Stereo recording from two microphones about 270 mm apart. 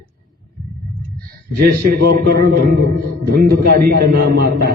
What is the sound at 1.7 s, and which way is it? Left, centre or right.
A man's voice, right.